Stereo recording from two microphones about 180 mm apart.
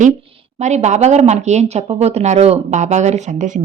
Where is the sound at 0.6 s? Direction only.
40° right (ahead or behind).